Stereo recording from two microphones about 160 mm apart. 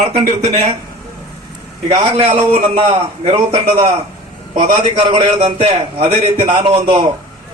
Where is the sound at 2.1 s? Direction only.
35° right (ahead or behind).